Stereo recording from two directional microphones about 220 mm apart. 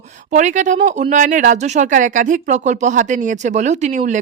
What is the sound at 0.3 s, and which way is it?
Speech, 35° right (ahead or behind).